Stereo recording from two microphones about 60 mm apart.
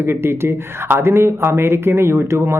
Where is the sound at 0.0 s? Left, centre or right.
Right.